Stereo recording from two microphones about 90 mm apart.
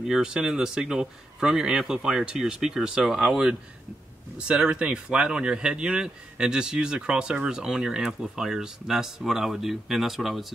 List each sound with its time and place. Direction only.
0.0 s speech: 5° right (ahead or behind)